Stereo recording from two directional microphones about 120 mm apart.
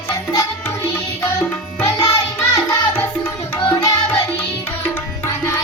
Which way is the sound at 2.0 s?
25° left (ahead or behind).